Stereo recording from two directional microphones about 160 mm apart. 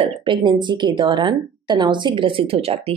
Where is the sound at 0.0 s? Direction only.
30° right (ahead or behind).